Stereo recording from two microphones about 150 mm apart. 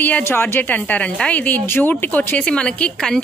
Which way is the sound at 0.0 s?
15° left (ahead or behind).